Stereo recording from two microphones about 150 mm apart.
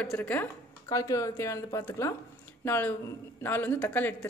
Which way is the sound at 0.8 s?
20° left (ahead or behind).